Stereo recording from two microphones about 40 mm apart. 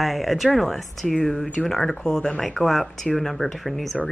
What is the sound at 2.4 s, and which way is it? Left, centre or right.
Speech, centre.